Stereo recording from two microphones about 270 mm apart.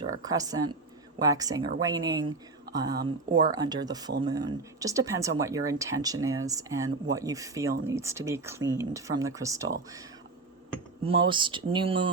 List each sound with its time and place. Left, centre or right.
0.2 s speech: centre
11.0 s speech: centre